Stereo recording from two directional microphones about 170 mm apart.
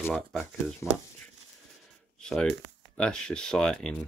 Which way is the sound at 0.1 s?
5° left (ahead or behind).